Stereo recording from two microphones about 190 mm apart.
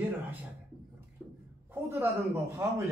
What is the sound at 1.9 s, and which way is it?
Speech, 15° right (ahead or behind).